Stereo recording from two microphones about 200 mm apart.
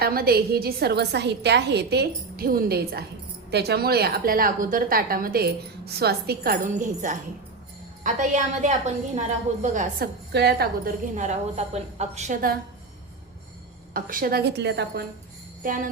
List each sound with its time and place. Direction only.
0.0 s a woman's voice: 50° right (ahead or behind)
10.3 s a woman's voice: 50° right (ahead or behind)
11.1 s a woman's voice: 35° right (ahead or behind)
13.9 s a woman's voice: 45° right (ahead or behind)
15.6 s a woman's voice: 40° right (ahead or behind)